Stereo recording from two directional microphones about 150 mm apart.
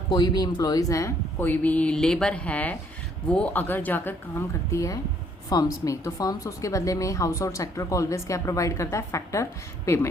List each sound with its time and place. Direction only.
0.1 s a woman's voice: 25° left (ahead or behind)